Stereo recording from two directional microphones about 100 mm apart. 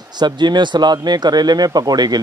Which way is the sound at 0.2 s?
45° right (ahead or behind).